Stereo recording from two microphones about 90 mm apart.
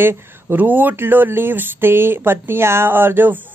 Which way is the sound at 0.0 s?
25° right (ahead or behind).